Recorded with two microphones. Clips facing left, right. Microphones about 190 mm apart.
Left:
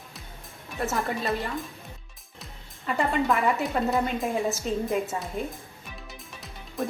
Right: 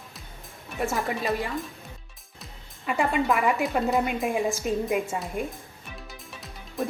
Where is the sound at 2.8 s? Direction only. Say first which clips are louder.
Right 1 dB; 10° right (ahead or behind).